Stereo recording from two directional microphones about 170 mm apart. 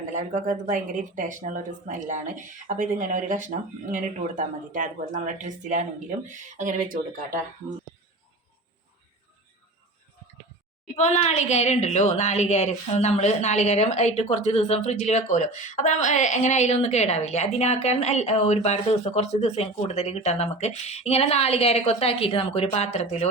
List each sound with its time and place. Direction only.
0.1 s speech: 50° right (ahead or behind)
10.9 s a woman's voice: 45° left (ahead or behind)